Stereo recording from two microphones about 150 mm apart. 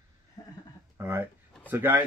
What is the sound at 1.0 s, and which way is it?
Speech, 15° right (ahead or behind).